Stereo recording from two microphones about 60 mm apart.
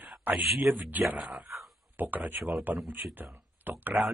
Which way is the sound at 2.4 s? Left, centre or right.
Centre.